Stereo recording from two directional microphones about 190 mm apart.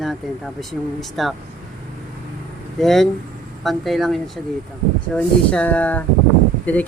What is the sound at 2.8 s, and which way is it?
A woman's voice, centre (ahead or behind).